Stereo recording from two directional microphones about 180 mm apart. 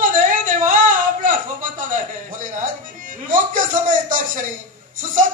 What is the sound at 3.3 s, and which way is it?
A man's voice, 50° right (ahead or behind).